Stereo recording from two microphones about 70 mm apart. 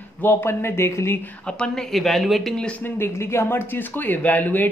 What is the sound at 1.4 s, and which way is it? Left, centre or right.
Speech, centre.